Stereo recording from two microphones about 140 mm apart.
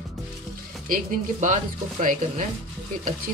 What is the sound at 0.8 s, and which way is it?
Speech, 75° right (ahead or behind).